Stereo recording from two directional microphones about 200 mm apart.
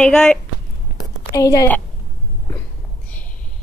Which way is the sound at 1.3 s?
15° left (ahead or behind).